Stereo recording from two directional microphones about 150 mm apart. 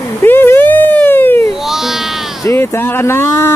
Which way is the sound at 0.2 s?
15° left (ahead or behind).